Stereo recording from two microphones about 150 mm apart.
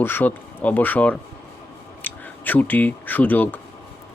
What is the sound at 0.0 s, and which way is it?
Speech, 15° left (ahead or behind).